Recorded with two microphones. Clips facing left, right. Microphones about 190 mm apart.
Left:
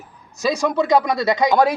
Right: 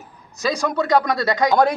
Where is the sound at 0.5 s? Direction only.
5° left (ahead or behind).